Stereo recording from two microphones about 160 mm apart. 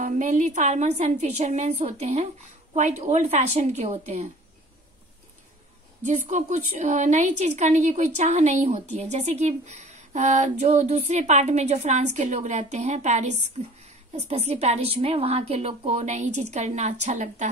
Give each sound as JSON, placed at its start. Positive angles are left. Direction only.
{"t": 0.0, "sound": "speech", "side_deg": -50}
{"t": 6.0, "sound": "speech", "side_deg": -50}